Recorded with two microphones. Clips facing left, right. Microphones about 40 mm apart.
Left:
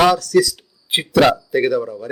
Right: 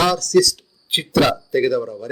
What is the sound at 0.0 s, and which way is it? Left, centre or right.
Speech, centre.